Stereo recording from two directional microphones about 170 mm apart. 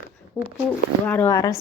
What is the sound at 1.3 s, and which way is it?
Speech, 20° left (ahead or behind).